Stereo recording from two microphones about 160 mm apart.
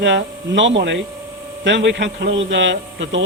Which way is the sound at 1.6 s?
90° right.